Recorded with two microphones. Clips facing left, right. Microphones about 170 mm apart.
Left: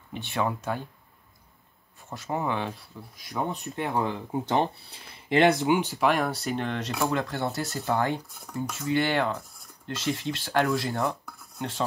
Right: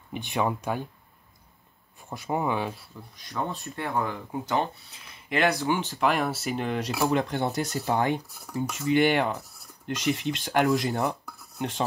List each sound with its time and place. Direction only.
0.1 s speech: 15° right (ahead or behind)
2.0 s speech: 15° right (ahead or behind)
3.2 s speech: 10° left (ahead or behind)
4.6 s speech: 35° left (ahead or behind); by 5.9 s 15° left (ahead or behind)
5.9 s speech: centre (ahead or behind)
7.1 s speech: 20° right (ahead or behind)